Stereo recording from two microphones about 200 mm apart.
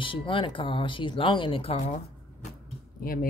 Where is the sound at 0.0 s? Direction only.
25° left (ahead or behind).